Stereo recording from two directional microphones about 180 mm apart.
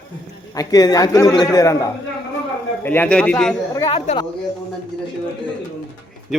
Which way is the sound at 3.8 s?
30° left (ahead or behind).